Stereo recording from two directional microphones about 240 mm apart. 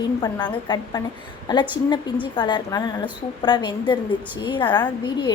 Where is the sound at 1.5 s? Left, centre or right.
Centre.